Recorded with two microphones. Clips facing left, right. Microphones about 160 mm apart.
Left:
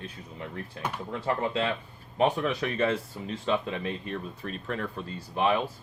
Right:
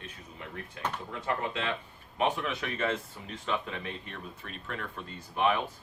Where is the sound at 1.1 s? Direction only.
35° left (ahead or behind).